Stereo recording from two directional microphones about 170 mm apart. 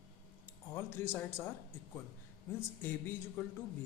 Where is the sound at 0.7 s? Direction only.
15° left (ahead or behind).